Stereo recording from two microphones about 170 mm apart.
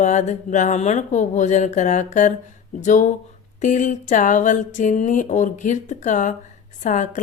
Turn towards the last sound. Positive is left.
turn(degrees=45)  # may be behind; listen again after turning